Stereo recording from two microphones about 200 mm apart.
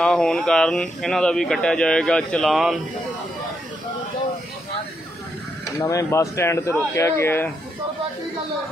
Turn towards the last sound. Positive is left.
turn(degrees=10)  # may be behind; listen again after turning